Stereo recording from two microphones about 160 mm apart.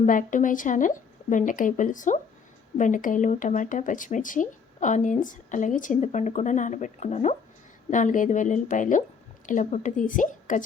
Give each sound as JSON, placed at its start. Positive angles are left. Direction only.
{"t": 0.0, "sound": "speech", "side_deg": 55}